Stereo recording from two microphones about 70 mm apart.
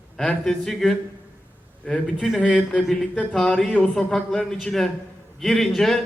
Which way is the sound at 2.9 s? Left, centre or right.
Centre.